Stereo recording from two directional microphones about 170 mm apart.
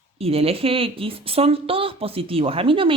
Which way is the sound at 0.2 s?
35° right (ahead or behind).